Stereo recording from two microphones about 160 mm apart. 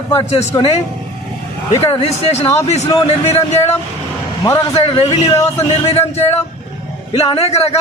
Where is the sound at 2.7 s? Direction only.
40° left (ahead or behind).